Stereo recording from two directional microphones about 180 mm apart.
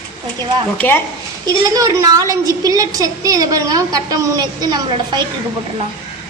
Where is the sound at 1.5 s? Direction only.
20° right (ahead or behind).